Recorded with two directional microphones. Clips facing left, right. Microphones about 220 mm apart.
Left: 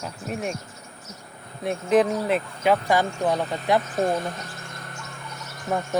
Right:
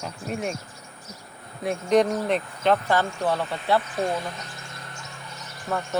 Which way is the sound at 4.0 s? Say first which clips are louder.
Left 3 dB; 45° left (ahead or behind).